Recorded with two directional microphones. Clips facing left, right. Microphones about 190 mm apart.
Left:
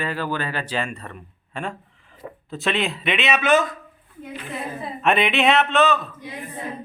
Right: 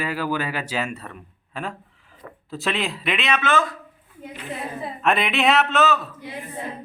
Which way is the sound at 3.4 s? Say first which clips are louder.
Left 5 dB; 20° left (ahead or behind).